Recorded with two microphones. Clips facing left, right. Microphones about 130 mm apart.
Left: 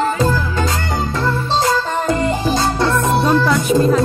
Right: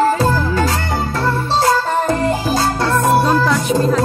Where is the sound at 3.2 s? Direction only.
Centre (ahead or behind).